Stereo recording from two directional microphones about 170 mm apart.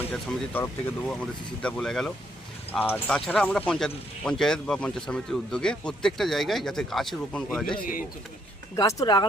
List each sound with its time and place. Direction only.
0.1 s speech: 10° left (ahead or behind)
8.7 s speech: 20° left (ahead or behind)